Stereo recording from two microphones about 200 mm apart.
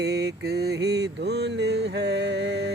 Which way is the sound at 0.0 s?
55° right (ahead or behind).